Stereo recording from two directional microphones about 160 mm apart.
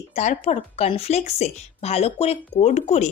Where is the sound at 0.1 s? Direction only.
45° left (ahead or behind).